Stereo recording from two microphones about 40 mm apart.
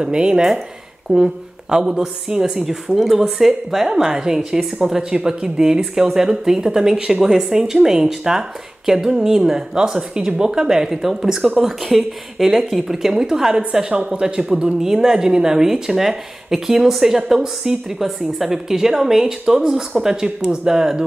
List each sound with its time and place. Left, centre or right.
0.0 s speech: right
13.7 s speech: right
14.5 s speech: centre